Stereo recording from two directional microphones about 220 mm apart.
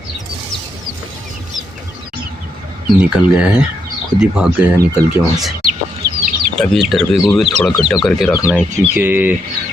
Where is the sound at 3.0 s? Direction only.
5° right (ahead or behind).